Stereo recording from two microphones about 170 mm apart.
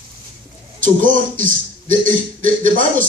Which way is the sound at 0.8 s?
50° right (ahead or behind).